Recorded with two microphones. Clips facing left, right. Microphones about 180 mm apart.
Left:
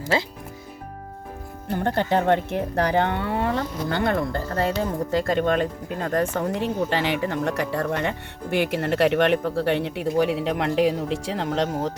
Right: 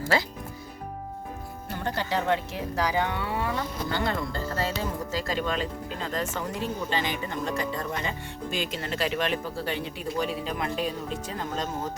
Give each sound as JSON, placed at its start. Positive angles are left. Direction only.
{"t": 0.1, "sound": "speech", "side_deg": 25}
{"t": 1.7, "sound": "speech", "side_deg": 55}